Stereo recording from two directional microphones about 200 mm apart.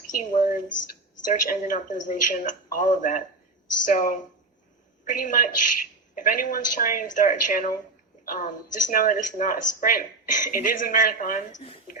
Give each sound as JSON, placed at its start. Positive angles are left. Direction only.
{"t": 0.2, "sound": "a woman's voice", "side_deg": 40}